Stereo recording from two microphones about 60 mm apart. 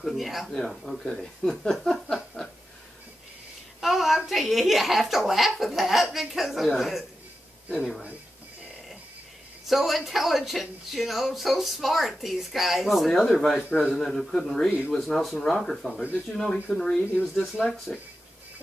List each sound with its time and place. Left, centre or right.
0.0 s speech: centre
3.8 s speech: centre
9.7 s speech: centre
13.6 s a man's voice: centre
13.8 s a man's voice: centre